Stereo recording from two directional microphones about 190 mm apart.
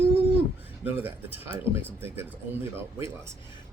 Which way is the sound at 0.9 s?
10° right (ahead or behind).